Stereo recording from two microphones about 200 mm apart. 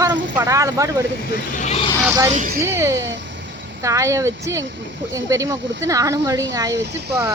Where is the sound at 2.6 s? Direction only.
15° right (ahead or behind).